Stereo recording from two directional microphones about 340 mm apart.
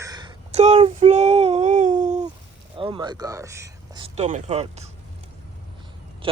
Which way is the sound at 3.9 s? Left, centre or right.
Centre.